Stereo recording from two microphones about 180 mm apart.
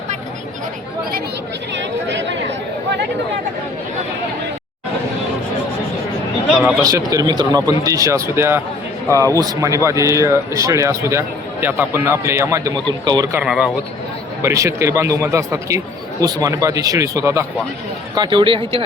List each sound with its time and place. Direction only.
1.7 s chatter: 80° right
6.5 s speech: centre (ahead or behind)
6.8 s speech: 20° right (ahead or behind)
13.4 s speech: 5° right (ahead or behind)
14.4 s speech: 15° right (ahead or behind)